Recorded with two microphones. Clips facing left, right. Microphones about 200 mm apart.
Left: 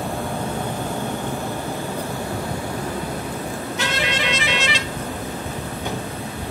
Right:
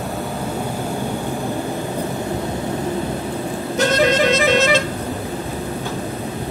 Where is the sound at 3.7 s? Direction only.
45° right (ahead or behind).